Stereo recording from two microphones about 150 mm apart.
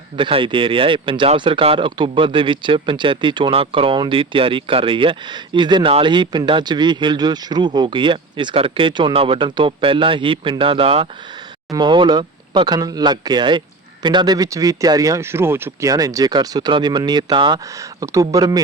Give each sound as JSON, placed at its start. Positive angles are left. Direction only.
{"t": 0.2, "sound": "speech", "side_deg": -35}
{"t": 18.0, "sound": "speech", "side_deg": -20}